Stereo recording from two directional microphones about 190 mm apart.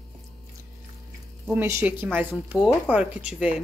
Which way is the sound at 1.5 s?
10° right (ahead or behind).